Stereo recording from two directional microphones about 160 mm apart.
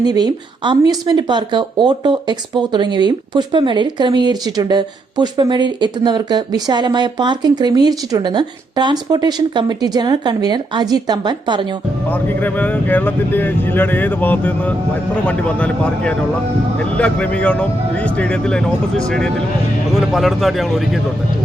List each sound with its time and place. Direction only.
0.0 s speech: 25° right (ahead or behind)
12.0 s a man's voice: 10° left (ahead or behind)